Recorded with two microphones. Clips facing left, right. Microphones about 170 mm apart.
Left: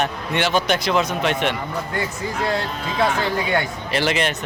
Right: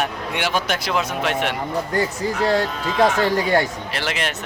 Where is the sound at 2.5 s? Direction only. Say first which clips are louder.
Right 4 dB; 40° right (ahead or behind).